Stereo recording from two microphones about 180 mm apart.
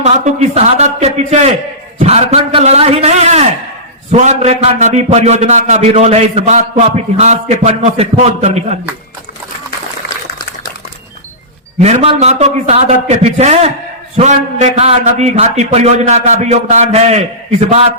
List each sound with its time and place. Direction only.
0.0 s a man's voice: 35° right (ahead or behind)
11.8 s a man's voice: 35° right (ahead or behind)